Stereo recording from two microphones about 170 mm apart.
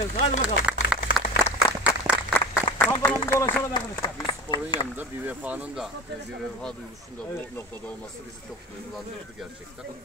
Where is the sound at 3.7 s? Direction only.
25° left (ahead or behind).